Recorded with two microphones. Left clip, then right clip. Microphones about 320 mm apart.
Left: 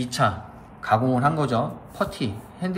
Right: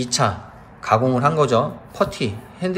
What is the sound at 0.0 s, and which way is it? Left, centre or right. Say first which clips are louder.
Speech: right 3 dB; centre.